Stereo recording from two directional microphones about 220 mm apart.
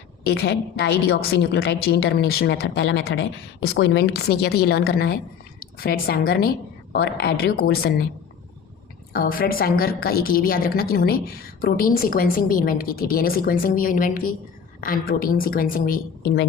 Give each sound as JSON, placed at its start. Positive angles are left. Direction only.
{"t": 0.3, "sound": "a woman's voice", "side_deg": 50}
{"t": 9.1, "sound": "a woman's voice", "side_deg": 40}